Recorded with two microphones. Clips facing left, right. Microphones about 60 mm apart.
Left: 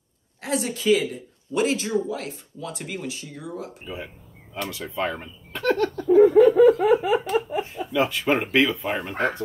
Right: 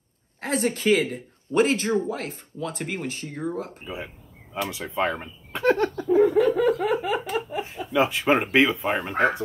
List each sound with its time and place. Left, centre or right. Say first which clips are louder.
0.4 s speech: right 2 dB; right
3.8 s speech: even; right
6.0 s laughter: left 5 dB; centre
6.8 s a sound: left 5 dB; centre
7.9 s speech: right 1 dB; right